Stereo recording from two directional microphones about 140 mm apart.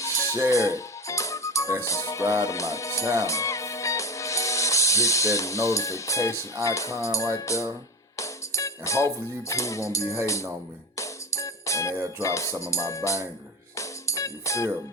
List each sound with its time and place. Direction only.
0.0 s music: 20° left (ahead or behind)
2.4 s speech: 20° left (ahead or behind)
10.9 s music: 20° left (ahead or behind)